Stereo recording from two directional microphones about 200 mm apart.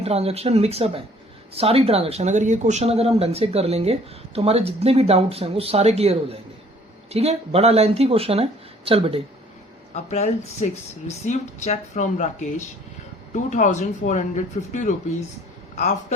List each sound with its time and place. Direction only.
0.0 s speech: 30° right (ahead or behind)
9.9 s speech: 35° left (ahead or behind)